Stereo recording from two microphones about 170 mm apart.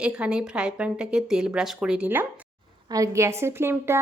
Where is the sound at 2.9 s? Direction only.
20° right (ahead or behind).